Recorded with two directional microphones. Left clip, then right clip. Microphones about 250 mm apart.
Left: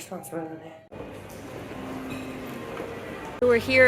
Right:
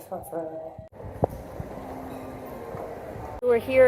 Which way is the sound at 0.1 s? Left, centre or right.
Left.